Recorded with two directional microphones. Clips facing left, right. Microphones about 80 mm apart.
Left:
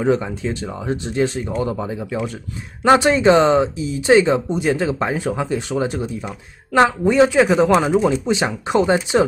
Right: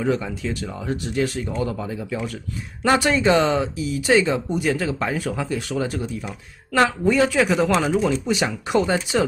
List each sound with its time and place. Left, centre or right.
0.0 s speech: left